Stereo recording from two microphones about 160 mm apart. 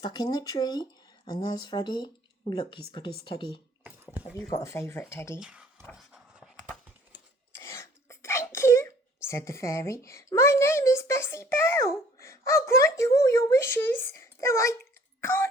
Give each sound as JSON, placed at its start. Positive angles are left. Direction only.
{"t": 0.0, "sound": "speech", "side_deg": 25}
{"t": 3.8, "sound": "dog", "side_deg": -10}
{"t": 4.4, "sound": "speech", "side_deg": 20}
{"t": 5.4, "sound": "speech", "side_deg": -5}
{"t": 5.9, "sound": "a sound", "side_deg": 0}
{"t": 7.6, "sound": "wail", "side_deg": 15}
{"t": 12.2, "sound": "speech", "side_deg": 15}
{"t": 15.2, "sound": "throat clearing", "side_deg": 15}